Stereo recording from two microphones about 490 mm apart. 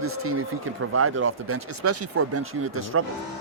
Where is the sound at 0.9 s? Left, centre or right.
Right.